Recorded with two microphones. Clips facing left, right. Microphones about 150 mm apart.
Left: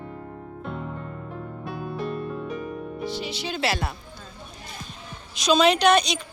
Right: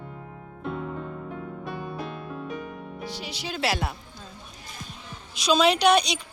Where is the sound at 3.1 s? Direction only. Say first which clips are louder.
Left 4 dB; 10° right (ahead or behind).